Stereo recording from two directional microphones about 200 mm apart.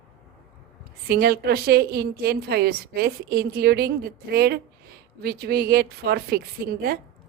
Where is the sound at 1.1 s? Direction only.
50° right (ahead or behind).